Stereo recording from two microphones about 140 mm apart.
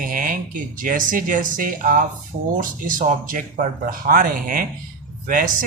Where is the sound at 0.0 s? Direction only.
75° right (ahead or behind).